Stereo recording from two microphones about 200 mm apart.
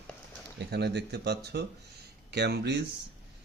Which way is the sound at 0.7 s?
55° right (ahead or behind).